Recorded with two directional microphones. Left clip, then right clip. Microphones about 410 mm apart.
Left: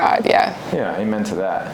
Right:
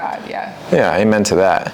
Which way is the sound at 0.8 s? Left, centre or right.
Right.